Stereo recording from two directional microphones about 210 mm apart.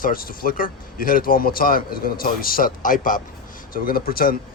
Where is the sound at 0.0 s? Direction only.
40° left (ahead or behind).